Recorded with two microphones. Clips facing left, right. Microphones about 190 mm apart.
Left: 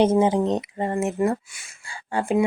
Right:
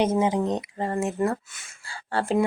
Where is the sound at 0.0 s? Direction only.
30° left (ahead or behind).